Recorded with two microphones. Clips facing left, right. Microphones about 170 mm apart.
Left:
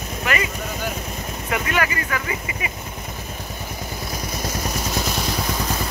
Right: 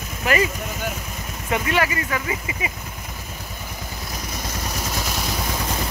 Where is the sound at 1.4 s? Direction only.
25° right (ahead or behind).